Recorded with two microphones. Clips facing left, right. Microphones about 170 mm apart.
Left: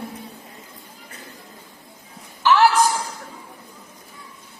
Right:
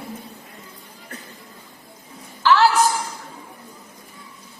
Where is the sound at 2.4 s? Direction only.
15° left (ahead or behind).